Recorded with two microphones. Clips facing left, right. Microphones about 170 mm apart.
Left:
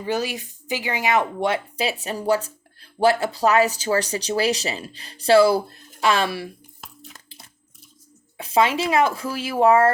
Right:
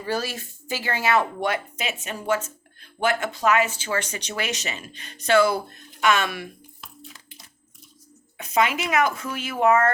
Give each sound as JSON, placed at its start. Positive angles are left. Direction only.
{"t": 0.0, "sound": "speech", "side_deg": 15}
{"t": 8.4, "sound": "speech", "side_deg": 30}